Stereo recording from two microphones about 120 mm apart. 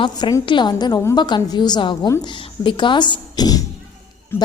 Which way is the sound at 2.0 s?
30° left (ahead or behind).